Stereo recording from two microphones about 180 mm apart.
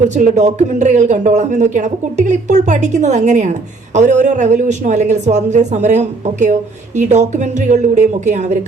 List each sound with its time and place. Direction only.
0.1 s speech: 40° right (ahead or behind)